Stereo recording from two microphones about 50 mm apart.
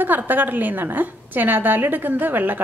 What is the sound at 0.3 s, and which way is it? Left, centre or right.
A woman's voice, right.